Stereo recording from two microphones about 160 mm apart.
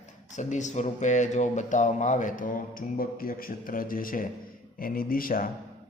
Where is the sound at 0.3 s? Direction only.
50° left (ahead or behind).